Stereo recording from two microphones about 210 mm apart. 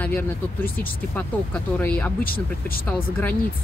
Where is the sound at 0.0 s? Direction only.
10° left (ahead or behind).